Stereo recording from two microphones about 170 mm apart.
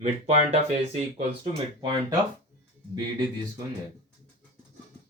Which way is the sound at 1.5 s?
30° right (ahead or behind).